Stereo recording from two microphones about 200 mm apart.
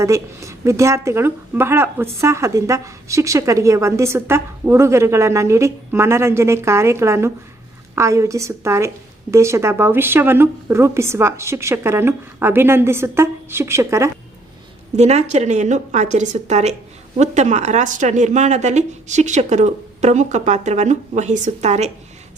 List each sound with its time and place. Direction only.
0.0 s speech: 15° right (ahead or behind)
14.9 s a woman's voice: 35° right (ahead or behind)